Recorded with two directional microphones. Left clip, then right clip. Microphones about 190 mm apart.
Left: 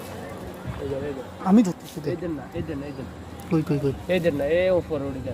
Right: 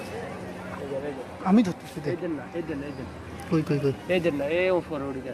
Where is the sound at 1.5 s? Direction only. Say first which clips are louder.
Left 3 dB; 30° left (ahead or behind).